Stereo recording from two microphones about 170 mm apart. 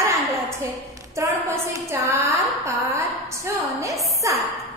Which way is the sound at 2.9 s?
15° right (ahead or behind).